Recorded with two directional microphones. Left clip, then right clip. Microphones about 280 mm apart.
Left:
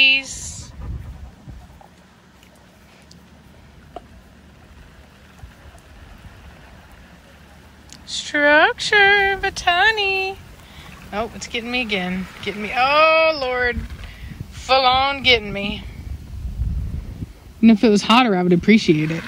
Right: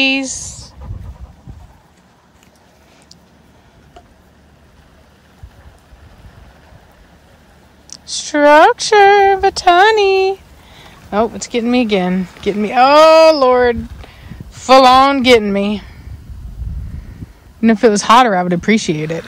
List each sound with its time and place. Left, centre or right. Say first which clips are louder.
0.0 s speech: even; right
8.1 s speech: right 6 dB; centre
17.7 s speech: right 8 dB; right